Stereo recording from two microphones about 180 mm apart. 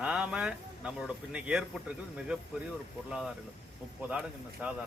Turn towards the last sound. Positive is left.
turn(degrees=-5)  # may be behind; listen again after turning